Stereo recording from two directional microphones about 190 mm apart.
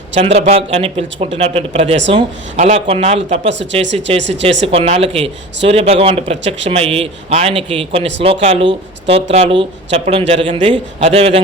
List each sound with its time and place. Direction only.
0.2 s speech: 30° right (ahead or behind)
4.2 s speech: 70° right (ahead or behind)
4.6 s speech: 30° right (ahead or behind)